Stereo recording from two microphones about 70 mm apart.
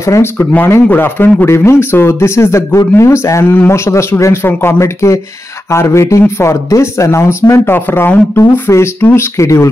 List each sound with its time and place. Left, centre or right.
0.0 s speech: left
0.8 s a man's voice: left